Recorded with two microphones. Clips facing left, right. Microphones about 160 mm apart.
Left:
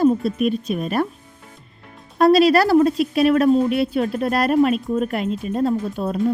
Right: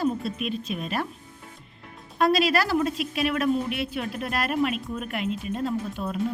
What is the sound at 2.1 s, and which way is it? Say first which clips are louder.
Speech: left 8 dB; 35° left (ahead or behind).